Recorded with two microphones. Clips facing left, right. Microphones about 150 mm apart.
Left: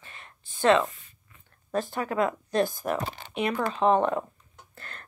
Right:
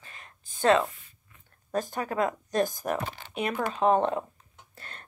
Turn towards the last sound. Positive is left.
turn(degrees=-45)  # may be behind; listen again after turning